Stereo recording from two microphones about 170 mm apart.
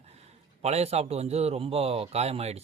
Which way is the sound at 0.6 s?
40° right (ahead or behind).